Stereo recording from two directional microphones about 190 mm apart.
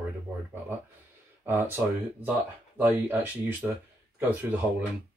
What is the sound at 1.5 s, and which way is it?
Speech, 10° right (ahead or behind).